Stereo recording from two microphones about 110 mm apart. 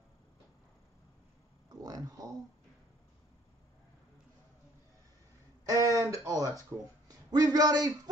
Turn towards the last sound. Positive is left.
turn(degrees=-35)  # may be behind; listen again after turning